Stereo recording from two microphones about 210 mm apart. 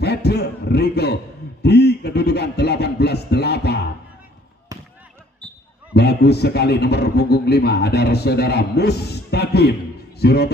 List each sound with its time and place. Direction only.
0.0 s a man's voice: 50° left (ahead or behind)
1.6 s a sound: 50° left (ahead or behind)
5.9 s a man's voice: 50° left (ahead or behind)